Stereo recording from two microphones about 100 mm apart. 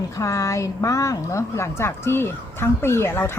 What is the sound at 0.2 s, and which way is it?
A woman's voice, 35° left (ahead or behind).